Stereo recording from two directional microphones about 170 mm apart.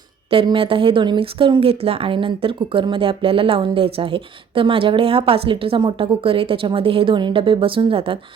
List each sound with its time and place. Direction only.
0.3 s speech: 30° right (ahead or behind)